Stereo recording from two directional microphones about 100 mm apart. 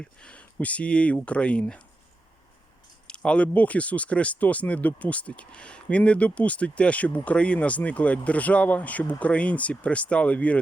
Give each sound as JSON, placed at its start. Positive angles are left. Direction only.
{"t": 0.0, "sound": "speech", "side_deg": 10}
{"t": 3.1, "sound": "speech", "side_deg": 10}